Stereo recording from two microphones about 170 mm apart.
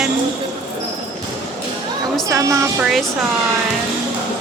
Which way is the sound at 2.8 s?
Centre (ahead or behind).